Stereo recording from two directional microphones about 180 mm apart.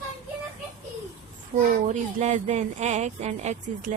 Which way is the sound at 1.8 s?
40° right (ahead or behind).